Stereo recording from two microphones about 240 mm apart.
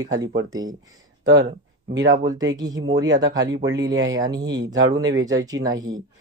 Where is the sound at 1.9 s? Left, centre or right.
Centre.